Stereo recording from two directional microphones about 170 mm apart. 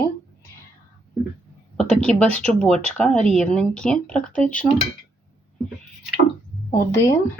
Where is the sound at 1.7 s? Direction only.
5° left (ahead or behind).